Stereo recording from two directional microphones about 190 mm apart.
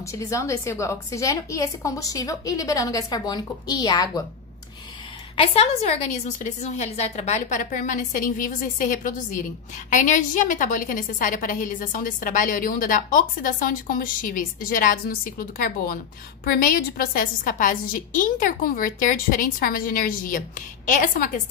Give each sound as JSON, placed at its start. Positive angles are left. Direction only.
{"t": 0.0, "sound": "a woman's voice", "side_deg": 15}
{"t": 5.3, "sound": "a woman's voice", "side_deg": 30}